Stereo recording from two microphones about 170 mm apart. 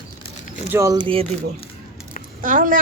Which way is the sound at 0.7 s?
20° right (ahead or behind).